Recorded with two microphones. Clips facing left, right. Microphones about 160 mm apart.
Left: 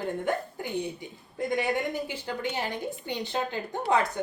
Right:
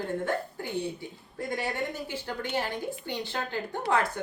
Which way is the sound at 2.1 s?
15° left (ahead or behind).